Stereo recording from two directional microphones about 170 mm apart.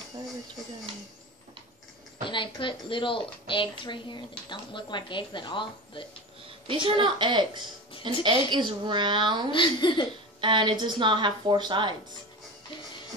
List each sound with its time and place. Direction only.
2.2 s a woman's voice: 30° left (ahead or behind)
6.7 s speech: 30° right (ahead or behind)
9.5 s a woman's voice: 25° left (ahead or behind)
10.4 s speech: 30° right (ahead or behind)